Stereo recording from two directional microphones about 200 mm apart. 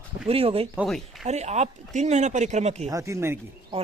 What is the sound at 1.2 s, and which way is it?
Speech, 35° right (ahead or behind).